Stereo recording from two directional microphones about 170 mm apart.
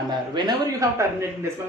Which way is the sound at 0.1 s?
25° right (ahead or behind).